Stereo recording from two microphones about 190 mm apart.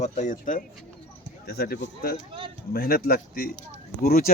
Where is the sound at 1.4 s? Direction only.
55° left (ahead or behind).